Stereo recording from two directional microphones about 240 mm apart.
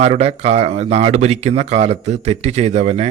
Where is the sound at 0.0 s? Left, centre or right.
Right.